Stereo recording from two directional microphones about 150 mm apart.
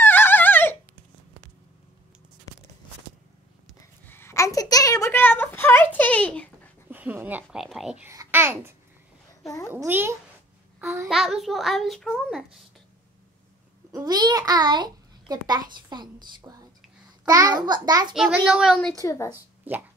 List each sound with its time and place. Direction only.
0.0 s dog: 15° left (ahead or behind)
3.8 s a sound: 15° left (ahead or behind)
6.9 s dog: 10° right (ahead or behind)
7.6 s a child's voice: centre (ahead or behind)
8.1 s a child's voice: 20° right (ahead or behind)
10.8 s a sound: 15° right (ahead or behind)
11.1 s a child's voice: centre (ahead or behind)
13.9 s a child's voice: 25° right (ahead or behind)
18.1 s a child's voice: 5° right (ahead or behind)
18.9 s a woman's voice: 20° left (ahead or behind)
19.7 s speech: 10° right (ahead or behind)